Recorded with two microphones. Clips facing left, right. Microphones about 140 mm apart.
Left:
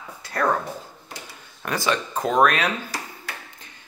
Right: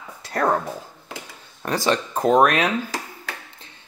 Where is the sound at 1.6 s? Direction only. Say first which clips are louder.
Right 3 dB; 35° right (ahead or behind).